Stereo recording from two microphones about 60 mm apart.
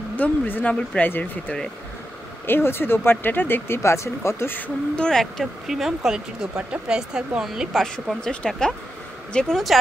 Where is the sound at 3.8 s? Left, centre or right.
Left.